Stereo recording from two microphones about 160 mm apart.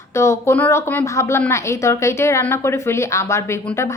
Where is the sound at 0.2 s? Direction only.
15° left (ahead or behind).